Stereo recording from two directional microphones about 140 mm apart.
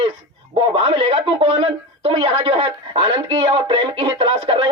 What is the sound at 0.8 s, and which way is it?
Speech, 40° right (ahead or behind).